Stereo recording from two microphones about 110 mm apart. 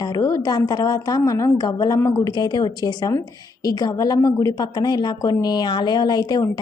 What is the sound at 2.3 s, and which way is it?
A woman's voice, 40° left (ahead or behind).